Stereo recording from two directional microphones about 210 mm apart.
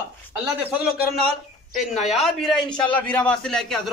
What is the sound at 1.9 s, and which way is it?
A man's voice, centre (ahead or behind).